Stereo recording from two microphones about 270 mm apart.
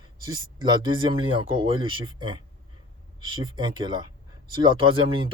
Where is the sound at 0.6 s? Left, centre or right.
Centre.